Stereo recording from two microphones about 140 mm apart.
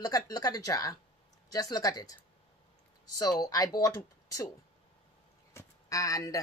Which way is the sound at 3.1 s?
25° left (ahead or behind).